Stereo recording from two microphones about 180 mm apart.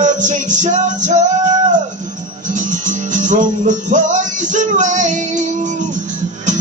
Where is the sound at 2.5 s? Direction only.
45° right (ahead or behind).